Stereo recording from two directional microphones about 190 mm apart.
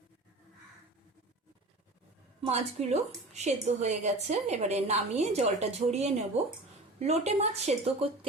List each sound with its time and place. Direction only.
2.4 s a woman's voice: 35° right (ahead or behind)